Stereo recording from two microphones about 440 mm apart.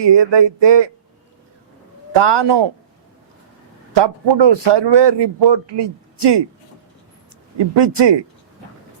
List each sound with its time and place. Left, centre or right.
0.0 s a man's voice: right
2.1 s a man's voice: right
3.9 s a man's voice: right
7.8 s a man's voice: right